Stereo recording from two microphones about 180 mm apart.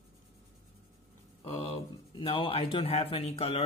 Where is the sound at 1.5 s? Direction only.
30° left (ahead or behind).